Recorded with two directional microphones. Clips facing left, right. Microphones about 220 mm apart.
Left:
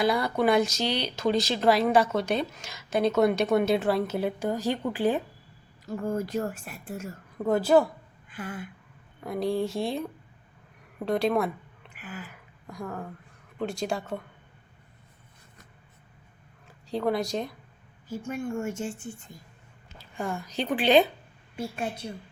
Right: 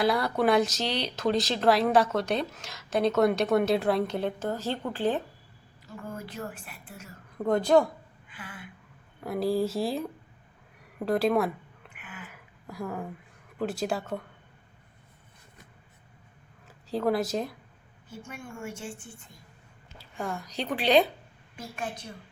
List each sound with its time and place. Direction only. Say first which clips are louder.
0.0 s speech: left 1 dB; centre (ahead or behind)
6.0 s a woman's voice: left 9 dB; 45° left (ahead or behind)
7.3 s speech: left 1 dB; 5° left (ahead or behind)
8.3 s a sound: left 9 dB; 45° left (ahead or behind)
9.2 s a woman's voice: right 1 dB; 5° right (ahead or behind)
11.9 s a sound: left 7 dB; 35° left (ahead or behind)
12.6 s a woman's voice: right 1 dB; 5° right (ahead or behind)
16.6 s speech: even; centre (ahead or behind)
18.3 s a woman's voice: left 9 dB; 40° left (ahead or behind)
20.1 s speech: left 2 dB; centre (ahead or behind)
21.6 s a woman's voice: left 5 dB; 30° left (ahead or behind)